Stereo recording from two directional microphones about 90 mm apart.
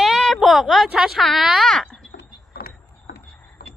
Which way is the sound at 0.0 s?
Centre (ahead or behind).